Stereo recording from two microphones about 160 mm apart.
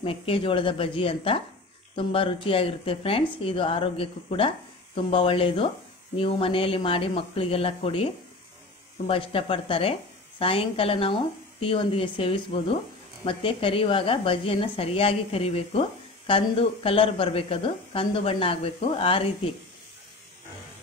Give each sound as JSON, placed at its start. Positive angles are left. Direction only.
{"t": 0.0, "sound": "a woman's voice", "side_deg": 35}